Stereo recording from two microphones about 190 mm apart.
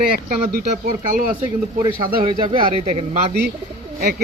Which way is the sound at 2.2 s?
30° right (ahead or behind).